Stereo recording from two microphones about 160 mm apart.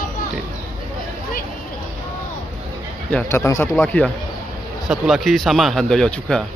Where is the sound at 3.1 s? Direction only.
15° left (ahead or behind).